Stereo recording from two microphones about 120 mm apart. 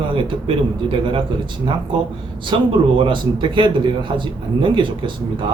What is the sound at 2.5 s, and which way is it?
A man's voice, 45° right (ahead or behind).